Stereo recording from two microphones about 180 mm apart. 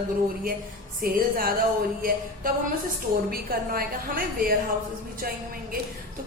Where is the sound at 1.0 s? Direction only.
50° right (ahead or behind).